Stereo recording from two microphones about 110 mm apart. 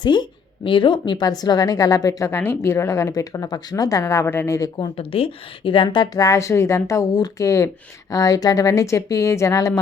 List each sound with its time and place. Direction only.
0.0 s a woman's voice: 45° left (ahead or behind); by 4.7 s 25° left (ahead or behind)
4.9 s a woman's voice: 60° left (ahead or behind)
6.1 s speech: 30° left (ahead or behind)